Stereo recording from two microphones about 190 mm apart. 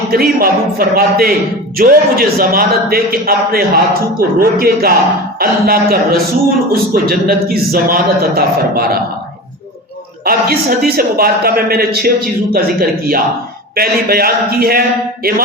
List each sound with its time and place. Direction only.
0.1 s a man's voice: 50° right (ahead or behind)
10.2 s a man's voice: 50° right (ahead or behind)